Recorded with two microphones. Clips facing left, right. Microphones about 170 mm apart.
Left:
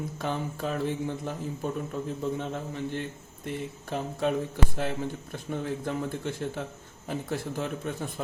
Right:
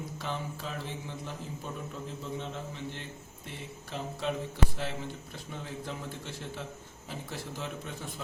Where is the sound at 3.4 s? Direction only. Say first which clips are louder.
Left 10 dB; 55° left (ahead or behind).